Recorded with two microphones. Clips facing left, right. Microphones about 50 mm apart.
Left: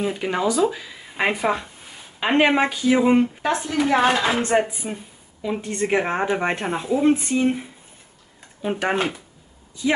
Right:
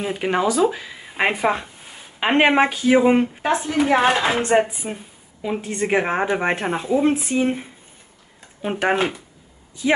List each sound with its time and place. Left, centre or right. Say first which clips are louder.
0.0 s a woman's voice: right 2 dB; right
5.4 s a woman's voice: right 1 dB; centre
8.6 s a woman's voice: right 2 dB; centre
8.9 s a woman's voice: right 2 dB; centre